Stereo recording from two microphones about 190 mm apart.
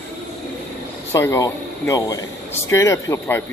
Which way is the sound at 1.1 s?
15° left (ahead or behind).